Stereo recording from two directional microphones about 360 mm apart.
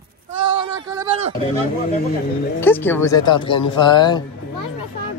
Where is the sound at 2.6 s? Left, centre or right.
Centre.